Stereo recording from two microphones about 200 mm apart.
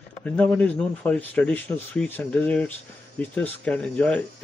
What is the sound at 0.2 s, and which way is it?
Speech, 5° left (ahead or behind).